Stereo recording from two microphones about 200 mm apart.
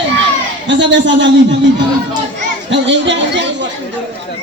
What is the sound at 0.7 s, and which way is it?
Speech, 65° right (ahead or behind).